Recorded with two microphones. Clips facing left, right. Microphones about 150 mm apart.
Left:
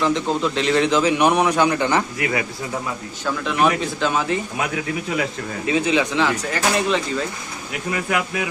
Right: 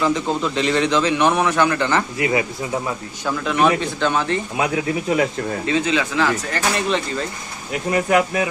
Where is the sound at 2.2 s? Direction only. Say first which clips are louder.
Right 3 dB; 25° right (ahead or behind).